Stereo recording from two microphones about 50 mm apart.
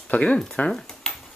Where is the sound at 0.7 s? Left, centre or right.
Centre.